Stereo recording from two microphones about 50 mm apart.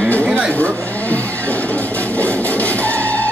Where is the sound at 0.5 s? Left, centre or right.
Left.